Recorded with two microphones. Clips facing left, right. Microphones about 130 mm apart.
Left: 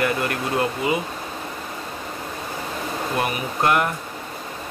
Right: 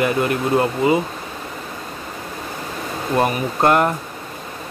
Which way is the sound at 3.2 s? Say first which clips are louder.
Right 7 dB; 35° right (ahead or behind).